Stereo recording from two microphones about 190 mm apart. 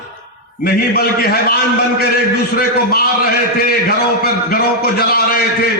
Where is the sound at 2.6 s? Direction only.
50° left (ahead or behind).